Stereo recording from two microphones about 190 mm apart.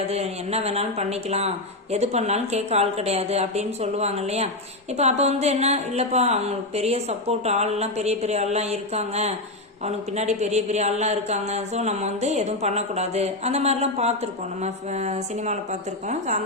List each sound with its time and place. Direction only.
0.1 s a man's voice: 35° right (ahead or behind)